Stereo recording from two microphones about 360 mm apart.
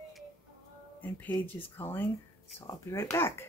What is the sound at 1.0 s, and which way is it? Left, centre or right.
Speech, centre.